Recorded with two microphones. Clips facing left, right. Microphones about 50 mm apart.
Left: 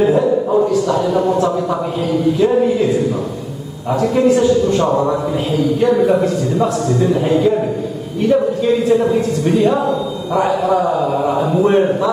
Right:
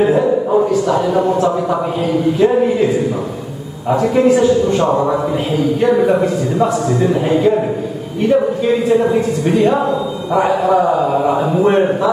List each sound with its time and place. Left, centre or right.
0.0 s a sound: centre
0.7 s a man's voice: centre
3.9 s a woman's voice: centre